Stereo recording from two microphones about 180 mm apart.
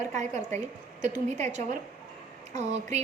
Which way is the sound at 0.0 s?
40° right (ahead or behind).